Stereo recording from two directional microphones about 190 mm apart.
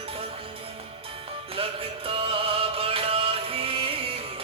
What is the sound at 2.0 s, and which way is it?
Music, 30° right (ahead or behind).